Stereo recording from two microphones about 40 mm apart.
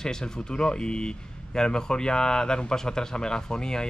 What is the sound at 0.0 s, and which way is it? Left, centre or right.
Speech, centre.